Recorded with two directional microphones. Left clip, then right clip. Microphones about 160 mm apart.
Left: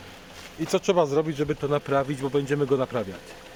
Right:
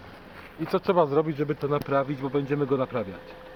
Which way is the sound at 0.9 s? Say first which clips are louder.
Even; 20° left (ahead or behind).